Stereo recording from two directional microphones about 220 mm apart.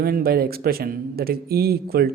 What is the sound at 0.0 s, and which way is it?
Speech, 45° right (ahead or behind).